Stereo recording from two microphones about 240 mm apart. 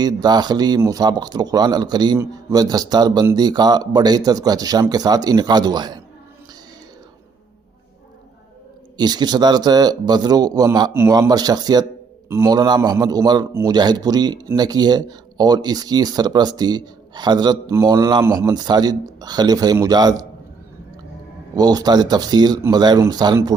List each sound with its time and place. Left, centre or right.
0.0 s a man's voice: centre
9.0 s a man's voice: centre
21.5 s a man's voice: centre